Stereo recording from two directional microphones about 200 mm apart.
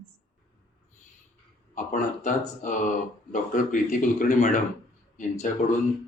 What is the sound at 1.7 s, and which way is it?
Speech, 40° left (ahead or behind).